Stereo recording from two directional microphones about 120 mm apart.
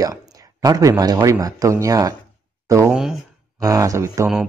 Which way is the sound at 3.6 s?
30° right (ahead or behind).